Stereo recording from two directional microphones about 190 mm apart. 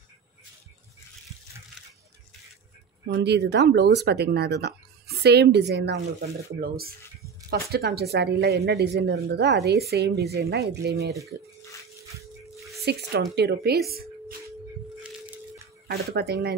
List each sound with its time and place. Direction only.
3.1 s speech: 60° right (ahead or behind)
6.6 s speech: 55° right (ahead or behind)
12.5 s a sound: centre (ahead or behind)
12.8 s speech: 60° right (ahead or behind)
15.0 s a sound: 5° right (ahead or behind)
15.9 s speech: 55° right (ahead or behind)